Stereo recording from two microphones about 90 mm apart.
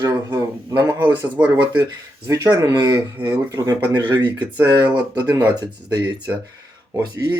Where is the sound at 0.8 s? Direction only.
20° right (ahead or behind).